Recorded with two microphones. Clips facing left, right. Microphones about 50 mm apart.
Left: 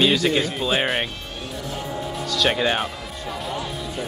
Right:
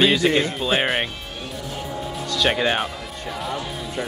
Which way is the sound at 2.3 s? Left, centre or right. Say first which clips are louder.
Right 1 dB; centre.